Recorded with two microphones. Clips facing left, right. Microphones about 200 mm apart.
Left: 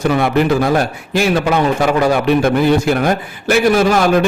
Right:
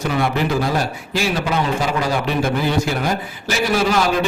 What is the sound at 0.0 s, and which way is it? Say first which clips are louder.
A man's voice: left 6 dB; 55° left (ahead or behind).